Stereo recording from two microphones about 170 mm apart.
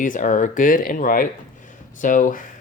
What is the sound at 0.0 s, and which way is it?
Speech, 50° left (ahead or behind).